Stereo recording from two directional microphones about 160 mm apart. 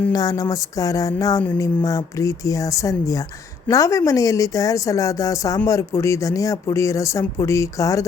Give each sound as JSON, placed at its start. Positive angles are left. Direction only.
{"t": 0.1, "sound": "speech", "side_deg": 25}